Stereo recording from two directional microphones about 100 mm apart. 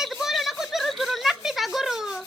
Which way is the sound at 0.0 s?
5° right (ahead or behind).